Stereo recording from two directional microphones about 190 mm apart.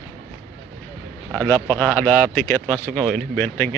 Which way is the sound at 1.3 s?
5° left (ahead or behind).